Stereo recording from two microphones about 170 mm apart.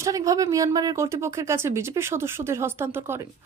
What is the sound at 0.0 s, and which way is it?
Speech, 20° right (ahead or behind).